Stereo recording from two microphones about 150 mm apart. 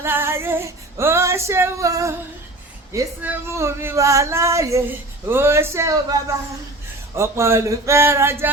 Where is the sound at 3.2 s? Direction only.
20° right (ahead or behind).